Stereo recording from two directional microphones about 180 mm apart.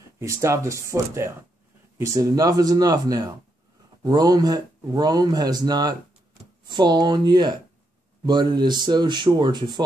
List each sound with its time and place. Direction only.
0.2 s speech: 15° right (ahead or behind)